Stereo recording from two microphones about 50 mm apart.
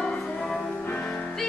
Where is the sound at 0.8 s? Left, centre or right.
Left.